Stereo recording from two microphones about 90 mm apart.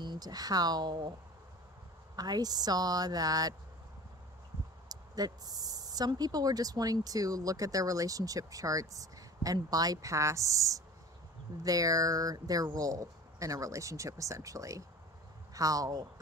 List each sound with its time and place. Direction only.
0.0 s speech: 50° right (ahead or behind)
2.1 s a woman's voice: 50° right (ahead or behind)
4.8 s speech: 45° right (ahead or behind)